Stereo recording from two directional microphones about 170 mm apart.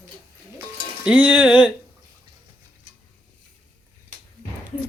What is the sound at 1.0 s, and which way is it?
Speech, 10° right (ahead or behind).